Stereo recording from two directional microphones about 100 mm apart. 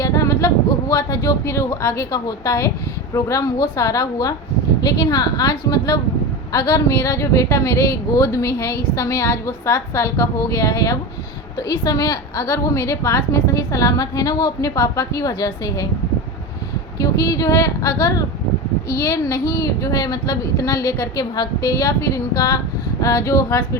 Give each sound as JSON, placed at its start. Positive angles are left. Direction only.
{"t": 0.0, "sound": "a woman's voice", "side_deg": 35}
{"t": 17.0, "sound": "a woman's voice", "side_deg": 35}